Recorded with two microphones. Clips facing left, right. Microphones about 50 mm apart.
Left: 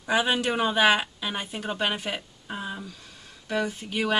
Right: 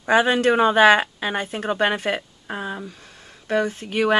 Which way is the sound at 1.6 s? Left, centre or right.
Right.